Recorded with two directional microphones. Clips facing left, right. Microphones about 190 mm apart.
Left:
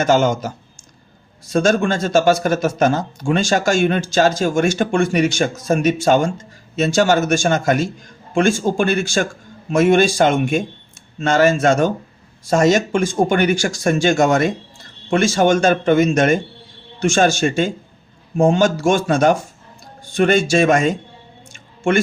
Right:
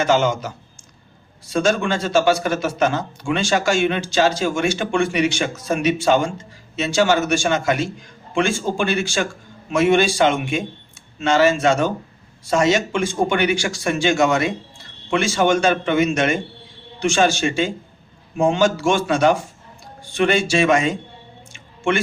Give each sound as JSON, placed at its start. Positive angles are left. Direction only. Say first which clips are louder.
{"t": 0.0, "sound": "speech", "louder": "left 2 dB", "side_deg": 45}